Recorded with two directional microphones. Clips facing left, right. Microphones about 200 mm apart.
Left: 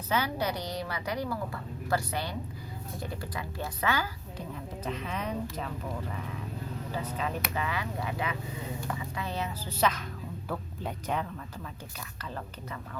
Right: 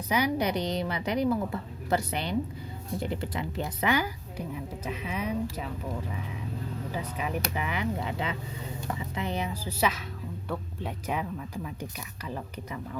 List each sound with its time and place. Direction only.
0.1 s a woman's voice: 15° right (ahead or behind)
6.9 s a woman's voice: 15° right (ahead or behind)